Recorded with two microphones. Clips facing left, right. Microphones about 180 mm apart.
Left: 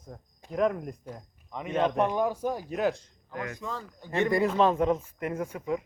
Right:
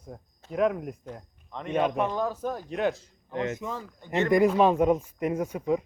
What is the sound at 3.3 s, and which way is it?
Speech, 20° right (ahead or behind).